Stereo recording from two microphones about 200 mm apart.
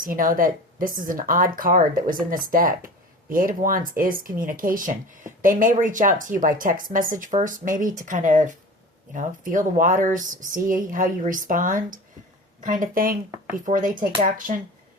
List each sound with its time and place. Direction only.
0.0 s speech: 45° right (ahead or behind)